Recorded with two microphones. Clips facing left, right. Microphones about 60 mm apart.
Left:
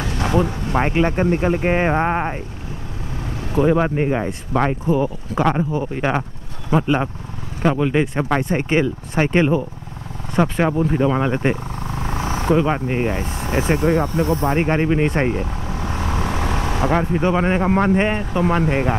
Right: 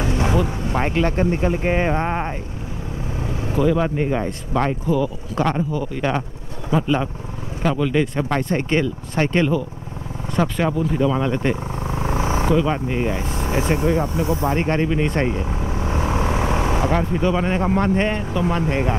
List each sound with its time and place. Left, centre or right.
0.0 s a sound: right
0.7 s speech: centre
3.5 s speech: left
4.8 s speech: left
10.8 s speech: left
11.8 s vehicle: centre
12.4 s speech: left
13.5 s vehicle: left
14.2 s speech: centre
14.5 s speech: left
15.6 s vehicle: right
16.9 s speech: left
18.3 s speech: left
18.7 s speech: centre